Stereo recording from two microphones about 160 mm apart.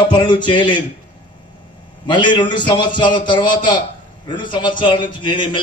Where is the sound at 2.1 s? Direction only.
30° left (ahead or behind).